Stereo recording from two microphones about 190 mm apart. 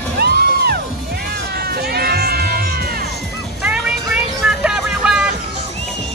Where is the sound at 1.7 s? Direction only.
55° right (ahead or behind).